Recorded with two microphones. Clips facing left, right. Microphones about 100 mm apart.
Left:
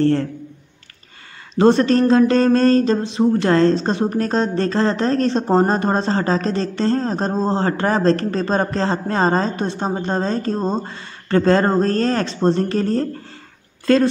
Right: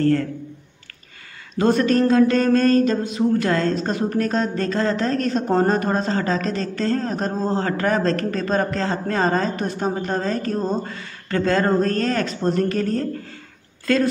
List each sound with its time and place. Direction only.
0.0 s mantra: 30° left (ahead or behind)
1.5 s mantra: 30° left (ahead or behind)
4.2 s speech: 30° left (ahead or behind)